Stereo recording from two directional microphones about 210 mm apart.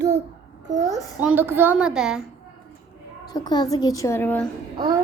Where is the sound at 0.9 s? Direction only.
5° right (ahead or behind).